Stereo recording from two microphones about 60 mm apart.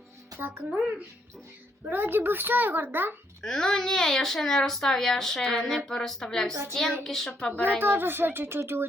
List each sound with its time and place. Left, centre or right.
0.3 s a child's voice: right
1.8 s a child's voice: right
3.4 s speech: centre
7.5 s speech: left
7.8 s a child's voice: right